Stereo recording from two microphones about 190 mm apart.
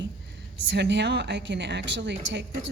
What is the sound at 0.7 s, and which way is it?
A woman's voice, 65° right (ahead or behind).